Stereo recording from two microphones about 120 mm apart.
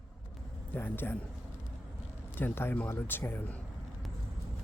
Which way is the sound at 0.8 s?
15° left (ahead or behind).